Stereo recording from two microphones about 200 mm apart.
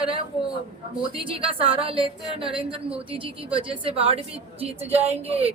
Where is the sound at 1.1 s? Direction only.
25° right (ahead or behind).